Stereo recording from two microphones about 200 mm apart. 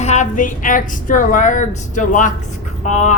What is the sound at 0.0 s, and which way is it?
Speech, 35° left (ahead or behind).